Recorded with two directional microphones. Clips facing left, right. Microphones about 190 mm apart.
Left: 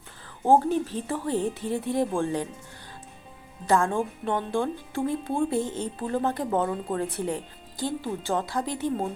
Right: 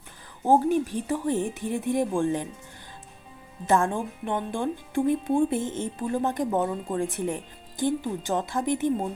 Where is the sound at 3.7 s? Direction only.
20° right (ahead or behind).